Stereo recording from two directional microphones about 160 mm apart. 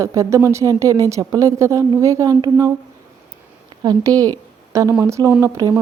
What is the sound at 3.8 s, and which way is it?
Speech, 25° right (ahead or behind).